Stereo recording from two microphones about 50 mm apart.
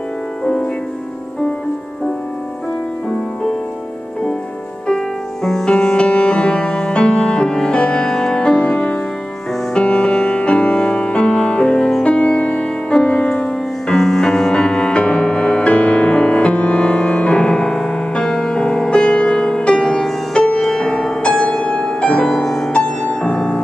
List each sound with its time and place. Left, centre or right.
4.8 s music: centre
22.4 s music: centre
22.7 s music: centre
23.2 s piano: left